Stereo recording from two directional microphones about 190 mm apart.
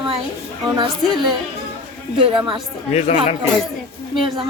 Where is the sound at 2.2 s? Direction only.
25° right (ahead or behind).